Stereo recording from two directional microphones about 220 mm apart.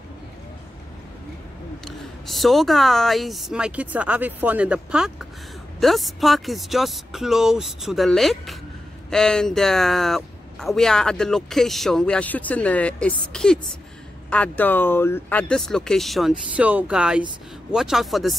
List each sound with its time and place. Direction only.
1.9 s speech: centre (ahead or behind)